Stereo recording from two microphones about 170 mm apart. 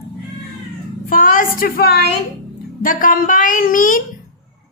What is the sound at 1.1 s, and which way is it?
A woman's voice, 55° left (ahead or behind).